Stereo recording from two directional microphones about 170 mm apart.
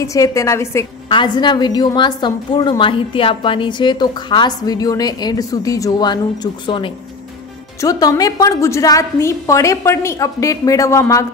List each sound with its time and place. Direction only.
0.0 s a woman's voice: 20° left (ahead or behind)
1.0 s a woman's voice: 25° left (ahead or behind)